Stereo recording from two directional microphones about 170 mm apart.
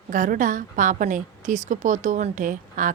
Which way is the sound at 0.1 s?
50° right (ahead or behind).